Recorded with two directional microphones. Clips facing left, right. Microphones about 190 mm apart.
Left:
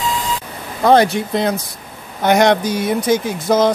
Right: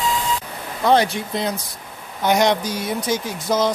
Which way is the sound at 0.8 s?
50° left (ahead or behind).